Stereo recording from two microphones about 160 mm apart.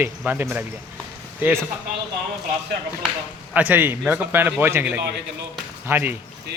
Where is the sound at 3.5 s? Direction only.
10° right (ahead or behind).